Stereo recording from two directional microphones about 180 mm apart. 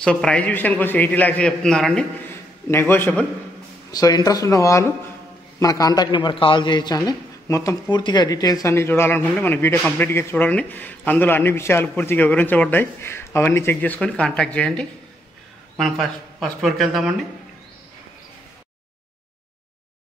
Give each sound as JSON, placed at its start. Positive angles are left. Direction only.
{"t": 0.0, "sound": "speech", "side_deg": 5}
{"t": 3.9, "sound": "a man's voice", "side_deg": 20}